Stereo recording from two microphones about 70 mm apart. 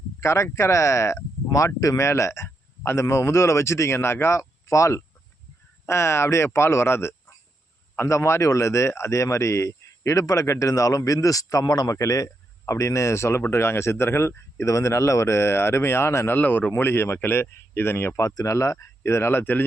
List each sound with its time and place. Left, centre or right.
0.2 s speech: left
18.2 s speech: left